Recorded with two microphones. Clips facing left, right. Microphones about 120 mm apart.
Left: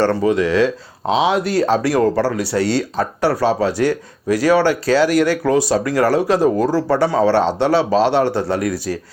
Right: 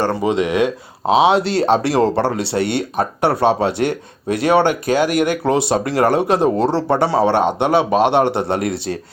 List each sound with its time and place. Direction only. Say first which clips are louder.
0.0 s speech: left 2 dB; 15° right (ahead or behind)